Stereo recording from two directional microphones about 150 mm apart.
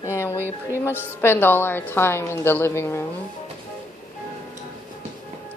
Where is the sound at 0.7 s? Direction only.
15° left (ahead or behind).